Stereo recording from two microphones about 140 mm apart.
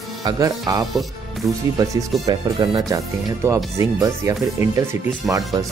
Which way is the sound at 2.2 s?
30° right (ahead or behind).